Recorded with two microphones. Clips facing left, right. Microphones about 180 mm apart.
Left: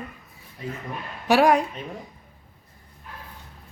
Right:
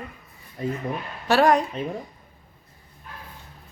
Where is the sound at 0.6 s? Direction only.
50° right (ahead or behind).